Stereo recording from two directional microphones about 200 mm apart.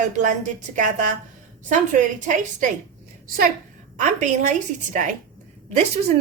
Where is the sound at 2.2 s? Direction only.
40° right (ahead or behind).